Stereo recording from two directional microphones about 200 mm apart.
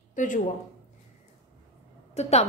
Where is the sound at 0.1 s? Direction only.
40° left (ahead or behind).